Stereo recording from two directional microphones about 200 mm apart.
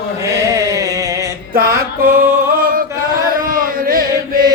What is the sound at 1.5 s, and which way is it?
Music, 45° right (ahead or behind).